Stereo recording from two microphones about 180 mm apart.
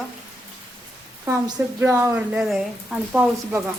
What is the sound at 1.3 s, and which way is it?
Speech, 20° right (ahead or behind).